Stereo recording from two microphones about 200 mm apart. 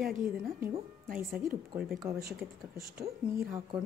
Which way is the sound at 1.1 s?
10° right (ahead or behind).